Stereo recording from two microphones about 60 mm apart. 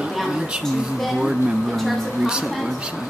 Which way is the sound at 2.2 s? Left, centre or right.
Centre.